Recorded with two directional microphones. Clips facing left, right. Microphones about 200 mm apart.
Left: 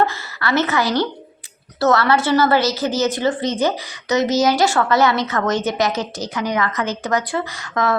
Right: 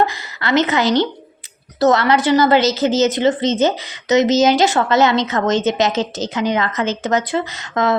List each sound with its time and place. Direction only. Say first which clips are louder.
0.0 s a woman's voice: right 1 dB; 15° right (ahead or behind)